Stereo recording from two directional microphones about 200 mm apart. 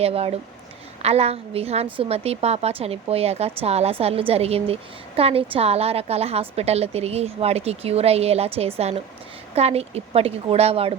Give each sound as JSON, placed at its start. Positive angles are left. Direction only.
{"t": 0.0, "sound": "a woman's voice", "side_deg": -30}